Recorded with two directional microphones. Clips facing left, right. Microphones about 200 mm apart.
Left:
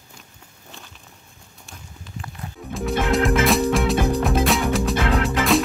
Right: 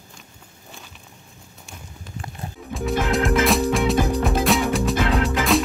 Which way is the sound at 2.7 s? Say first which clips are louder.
Left 1 dB; centre (ahead or behind).